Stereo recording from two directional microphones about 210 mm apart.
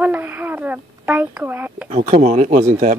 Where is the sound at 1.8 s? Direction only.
30° right (ahead or behind).